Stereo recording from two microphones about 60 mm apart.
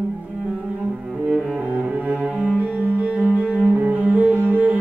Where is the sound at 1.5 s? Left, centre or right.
Right.